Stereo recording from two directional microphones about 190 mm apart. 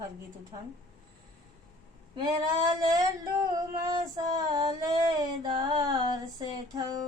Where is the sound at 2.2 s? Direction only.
25° right (ahead or behind).